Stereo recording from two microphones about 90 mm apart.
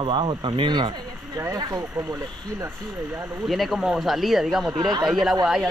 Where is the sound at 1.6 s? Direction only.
50° right (ahead or behind).